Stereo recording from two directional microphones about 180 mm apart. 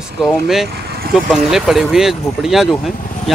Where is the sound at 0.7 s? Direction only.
60° right (ahead or behind).